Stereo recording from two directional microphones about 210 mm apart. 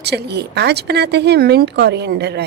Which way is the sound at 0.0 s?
50° right (ahead or behind).